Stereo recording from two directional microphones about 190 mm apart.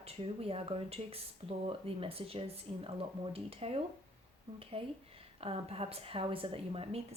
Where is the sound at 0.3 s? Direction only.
30° right (ahead or behind).